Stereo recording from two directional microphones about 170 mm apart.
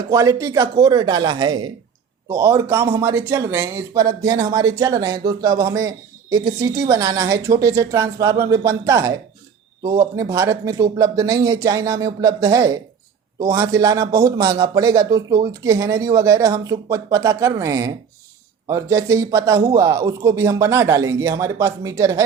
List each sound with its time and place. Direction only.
0.1 s speech: 20° right (ahead or behind)